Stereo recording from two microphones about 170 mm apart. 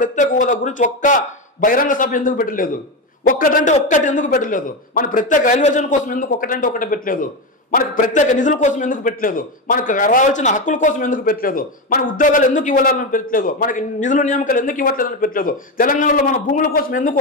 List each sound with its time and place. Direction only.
0.0 s a man's voice: 50° left (ahead or behind)